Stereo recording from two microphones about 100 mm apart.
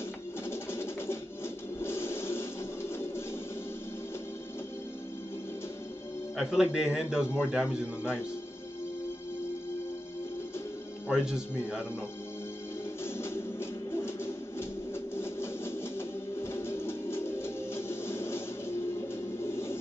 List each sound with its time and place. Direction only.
0.5 s music: 25° left (ahead or behind)
1.8 s a sound: 25° left (ahead or behind)
6.3 s a man's voice: 5° right (ahead or behind)
11.1 s a man's voice: 5° right (ahead or behind)
13.0 s music: 25° left (ahead or behind)